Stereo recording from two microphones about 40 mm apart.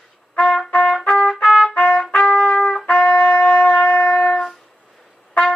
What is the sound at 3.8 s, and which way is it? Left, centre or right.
Shofar, left.